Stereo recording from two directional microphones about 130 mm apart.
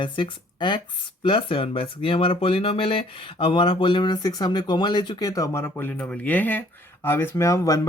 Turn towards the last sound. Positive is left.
turn(degrees=25)  # may be behind; listen again after turning